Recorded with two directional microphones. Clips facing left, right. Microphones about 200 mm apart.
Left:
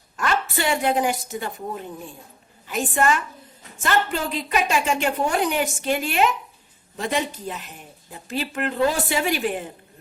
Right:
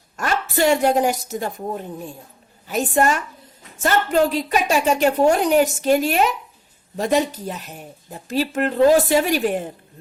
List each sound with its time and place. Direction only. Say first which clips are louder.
0.2 s a woman's voice: right 4 dB; 40° right (ahead or behind)
4.3 s a woman's voice: right 3 dB; 45° right (ahead or behind)